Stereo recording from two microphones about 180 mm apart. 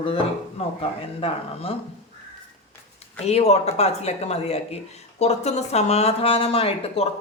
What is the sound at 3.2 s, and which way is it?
Speech, 35° left (ahead or behind).